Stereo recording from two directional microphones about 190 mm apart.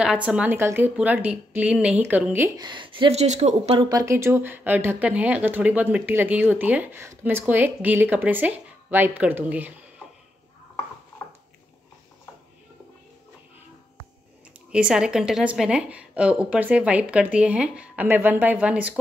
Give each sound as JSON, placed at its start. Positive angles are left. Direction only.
{"t": 0.0, "sound": "speech", "side_deg": -5}
{"t": 3.9, "sound": "speech", "side_deg": -15}
{"t": 14.7, "sound": "speech", "side_deg": -5}